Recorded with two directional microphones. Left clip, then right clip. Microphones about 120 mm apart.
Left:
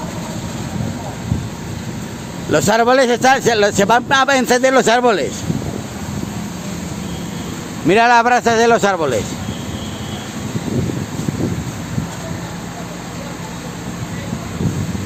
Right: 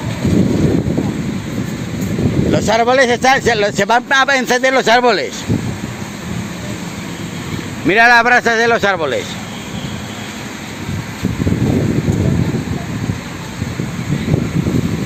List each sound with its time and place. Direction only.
2.5 s speech: 35° left (ahead or behind); by 4.9 s 15° left (ahead or behind)
4.9 s speech: centre (ahead or behind)
7.9 s speech: 20° left (ahead or behind); by 9.1 s centre (ahead or behind)